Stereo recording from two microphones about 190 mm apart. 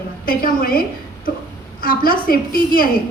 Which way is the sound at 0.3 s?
50° left (ahead or behind).